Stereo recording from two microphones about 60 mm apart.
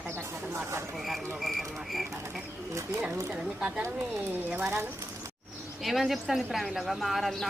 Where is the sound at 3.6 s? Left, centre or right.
Centre.